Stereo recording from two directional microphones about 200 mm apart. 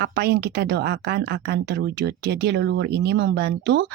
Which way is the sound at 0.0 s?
50° right (ahead or behind).